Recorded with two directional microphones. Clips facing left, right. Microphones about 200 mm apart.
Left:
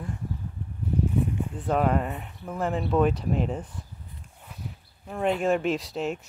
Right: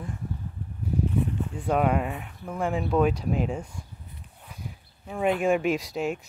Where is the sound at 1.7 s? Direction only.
5° right (ahead or behind).